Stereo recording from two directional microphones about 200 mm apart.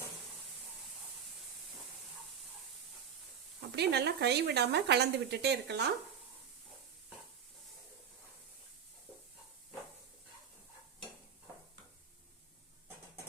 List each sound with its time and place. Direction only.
3.7 s speech: 55° right (ahead or behind)